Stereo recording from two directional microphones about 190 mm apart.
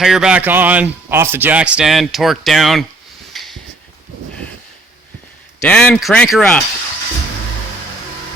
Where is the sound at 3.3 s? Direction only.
Centre (ahead or behind).